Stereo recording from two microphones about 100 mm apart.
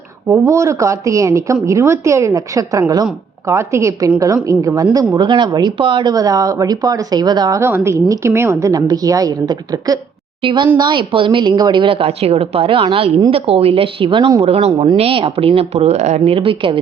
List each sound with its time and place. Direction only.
0.3 s a woman's voice: 30° right (ahead or behind)
7.6 s a woman's voice: 25° right (ahead or behind)
10.4 s a woman's voice: 55° right (ahead or behind)
13.3 s speech: 80° right; by 14.3 s 60° right (ahead or behind)
14.4 s speech: 85° right
14.9 s speech: 70° right (ahead or behind)